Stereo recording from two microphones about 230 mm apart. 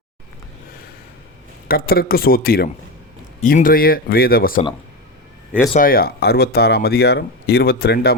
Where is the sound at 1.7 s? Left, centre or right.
Left.